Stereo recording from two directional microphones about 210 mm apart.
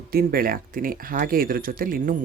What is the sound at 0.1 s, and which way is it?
Speech, 45° right (ahead or behind).